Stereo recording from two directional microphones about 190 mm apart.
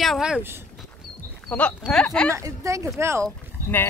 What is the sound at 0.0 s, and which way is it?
Speech, centre (ahead or behind).